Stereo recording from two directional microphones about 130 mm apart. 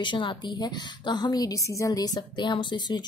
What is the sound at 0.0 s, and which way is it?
Speech, 40° left (ahead or behind).